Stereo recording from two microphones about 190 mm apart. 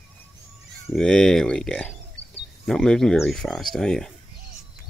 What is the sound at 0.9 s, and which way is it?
Speech, centre (ahead or behind).